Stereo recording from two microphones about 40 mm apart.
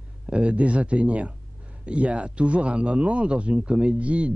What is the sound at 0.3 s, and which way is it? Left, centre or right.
A man's voice, right.